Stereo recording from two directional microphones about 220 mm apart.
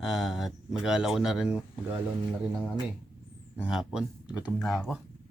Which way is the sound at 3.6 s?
5° right (ahead or behind).